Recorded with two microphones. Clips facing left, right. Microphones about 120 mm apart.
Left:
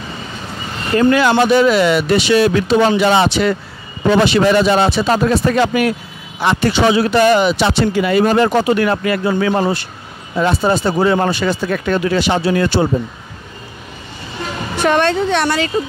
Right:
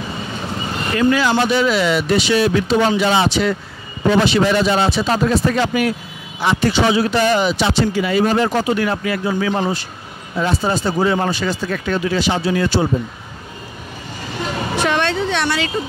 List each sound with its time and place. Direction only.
1.1 s speech: 60° left (ahead or behind)
14.9 s speech: 45° left (ahead or behind)